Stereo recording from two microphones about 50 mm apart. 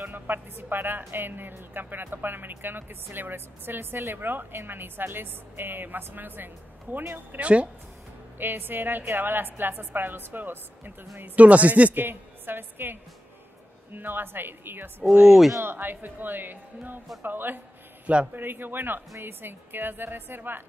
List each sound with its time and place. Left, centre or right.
0.0 s speech: right
7.3 s speech: right
8.4 s speech: right
11.3 s speech: right
11.9 s a woman's voice: right
13.9 s speech: right
15.2 s speech: centre
15.6 s speech: right
18.0 s a man's voice: right
18.3 s speech: right